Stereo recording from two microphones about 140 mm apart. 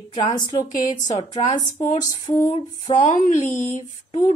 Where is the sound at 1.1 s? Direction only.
55° left (ahead or behind).